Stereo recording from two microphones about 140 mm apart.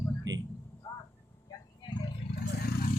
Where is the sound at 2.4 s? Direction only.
90° left.